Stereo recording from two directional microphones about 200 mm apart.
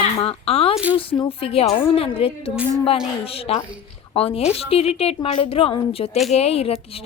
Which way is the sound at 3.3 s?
30° left (ahead or behind).